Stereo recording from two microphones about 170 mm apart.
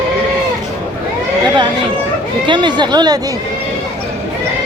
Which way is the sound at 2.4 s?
30° right (ahead or behind).